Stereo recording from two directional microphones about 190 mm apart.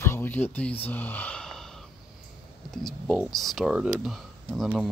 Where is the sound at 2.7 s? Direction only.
Centre (ahead or behind).